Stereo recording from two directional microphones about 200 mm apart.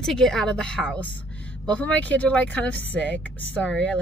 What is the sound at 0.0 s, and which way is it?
A woman's voice, centre (ahead or behind).